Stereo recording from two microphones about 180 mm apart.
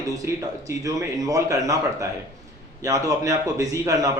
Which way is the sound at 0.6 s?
20° right (ahead or behind).